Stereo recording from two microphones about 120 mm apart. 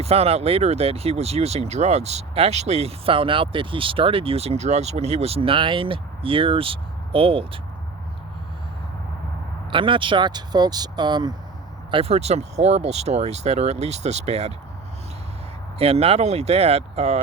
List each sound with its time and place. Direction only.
0.0 s speech: 55° right (ahead or behind)
9.6 s speech: 45° right (ahead or behind)
11.9 s speech: 50° right (ahead or behind)
15.8 s speech: 55° right (ahead or behind)